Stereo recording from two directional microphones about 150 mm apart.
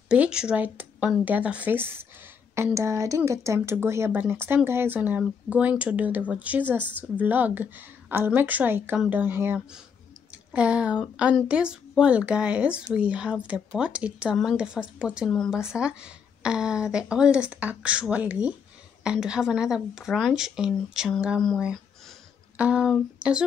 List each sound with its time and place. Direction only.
0.1 s speech: 5° right (ahead or behind)